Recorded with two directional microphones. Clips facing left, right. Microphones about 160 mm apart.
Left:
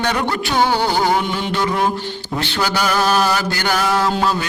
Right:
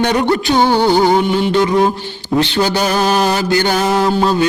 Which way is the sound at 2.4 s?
20° right (ahead or behind).